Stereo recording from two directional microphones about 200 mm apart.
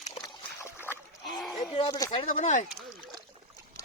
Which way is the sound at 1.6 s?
20° left (ahead or behind).